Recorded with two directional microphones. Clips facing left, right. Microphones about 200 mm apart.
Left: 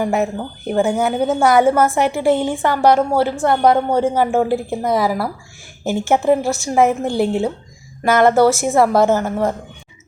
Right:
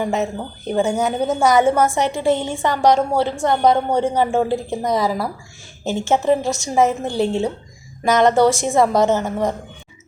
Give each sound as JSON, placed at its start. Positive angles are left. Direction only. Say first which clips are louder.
{"t": 0.0, "sound": "a woman's voice", "louder": "left 3 dB", "side_deg": 10}